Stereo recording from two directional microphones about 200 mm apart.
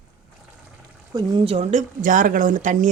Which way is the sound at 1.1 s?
25° right (ahead or behind).